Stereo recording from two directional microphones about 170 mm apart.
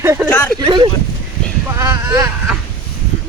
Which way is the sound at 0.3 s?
10° left (ahead or behind).